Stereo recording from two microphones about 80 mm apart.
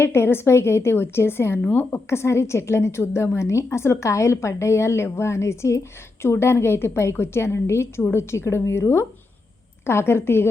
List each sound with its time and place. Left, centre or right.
0.0 s a woman's voice: left